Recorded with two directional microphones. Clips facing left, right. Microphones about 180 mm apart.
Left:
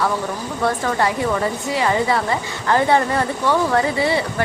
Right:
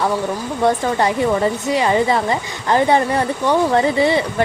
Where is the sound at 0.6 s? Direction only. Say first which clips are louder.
Right 3 dB; 20° right (ahead or behind).